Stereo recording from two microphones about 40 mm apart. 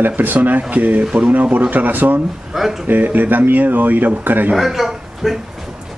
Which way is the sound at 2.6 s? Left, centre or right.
Centre.